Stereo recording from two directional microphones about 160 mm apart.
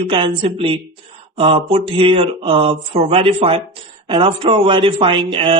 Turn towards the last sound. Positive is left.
turn(degrees=-35)  # may be behind; listen again after turning